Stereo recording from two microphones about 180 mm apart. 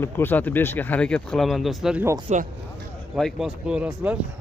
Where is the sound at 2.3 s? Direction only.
40° right (ahead or behind).